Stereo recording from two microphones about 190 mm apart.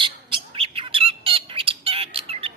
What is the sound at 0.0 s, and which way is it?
Bird, 30° right (ahead or behind).